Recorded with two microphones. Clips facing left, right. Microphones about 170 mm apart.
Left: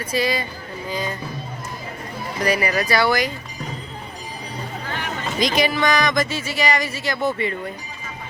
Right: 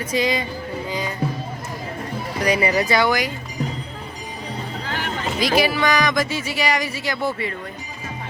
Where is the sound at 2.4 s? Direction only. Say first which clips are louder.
Right 2 dB; 20° right (ahead or behind).